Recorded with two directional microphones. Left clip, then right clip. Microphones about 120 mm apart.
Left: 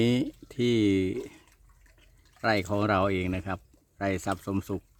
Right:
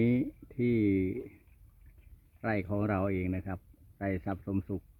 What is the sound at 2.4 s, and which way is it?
Speech, 20° left (ahead or behind).